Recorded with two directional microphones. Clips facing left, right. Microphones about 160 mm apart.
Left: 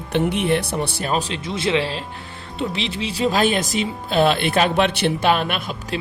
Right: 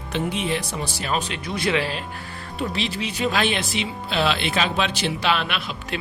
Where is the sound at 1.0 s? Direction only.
35° left (ahead or behind).